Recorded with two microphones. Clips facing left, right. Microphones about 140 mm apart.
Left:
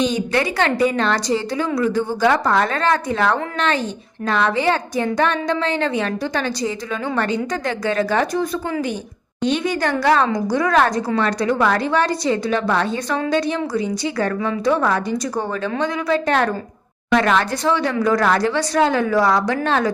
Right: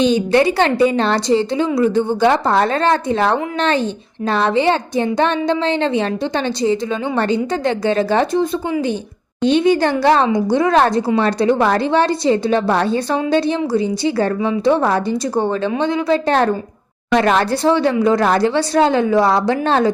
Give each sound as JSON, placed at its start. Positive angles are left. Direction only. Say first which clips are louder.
{"t": 0.0, "sound": "a woman's voice", "louder": "right 6 dB", "side_deg": -30}